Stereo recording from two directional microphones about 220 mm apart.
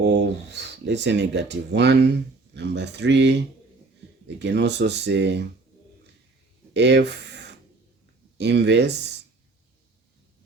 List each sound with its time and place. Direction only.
0.0 s speech: 50° right (ahead or behind)
6.7 s speech: 50° right (ahead or behind)